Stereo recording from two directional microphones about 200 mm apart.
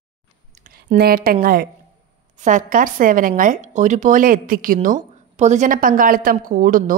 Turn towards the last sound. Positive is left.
turn(degrees=-45)  # may be behind; listen again after turning